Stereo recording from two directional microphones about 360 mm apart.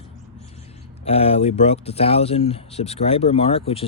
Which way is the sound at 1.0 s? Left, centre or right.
Centre.